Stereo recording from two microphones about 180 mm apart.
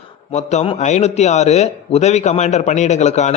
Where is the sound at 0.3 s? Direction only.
35° left (ahead or behind).